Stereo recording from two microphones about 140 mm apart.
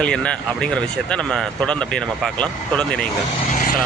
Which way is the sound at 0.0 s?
5° left (ahead or behind).